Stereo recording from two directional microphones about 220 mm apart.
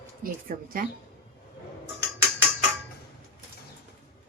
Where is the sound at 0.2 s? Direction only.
40° right (ahead or behind).